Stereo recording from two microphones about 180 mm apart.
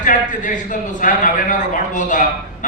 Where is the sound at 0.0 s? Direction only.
45° left (ahead or behind).